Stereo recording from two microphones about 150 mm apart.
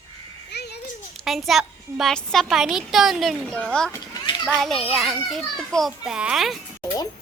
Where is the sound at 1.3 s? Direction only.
Centre (ahead or behind).